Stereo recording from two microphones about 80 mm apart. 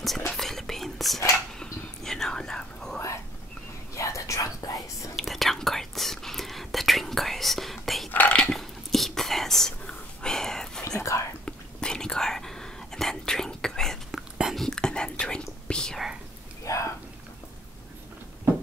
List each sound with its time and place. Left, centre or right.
0.3 s whispering: centre
3.9 s whispering: left
5.1 s whispering: centre
8.1 s a sound: left
8.4 s whispering: centre
11.0 s whispering: left
11.4 s whispering: centre
16.6 s whispering: left